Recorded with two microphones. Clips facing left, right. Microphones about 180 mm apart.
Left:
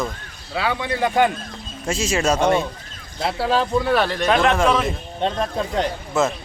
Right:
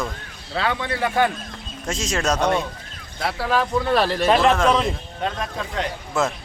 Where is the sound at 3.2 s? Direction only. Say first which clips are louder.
Left 2 dB; 25° left (ahead or behind).